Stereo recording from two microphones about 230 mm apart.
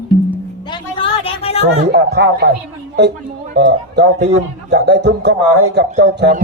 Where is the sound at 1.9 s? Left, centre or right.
Right.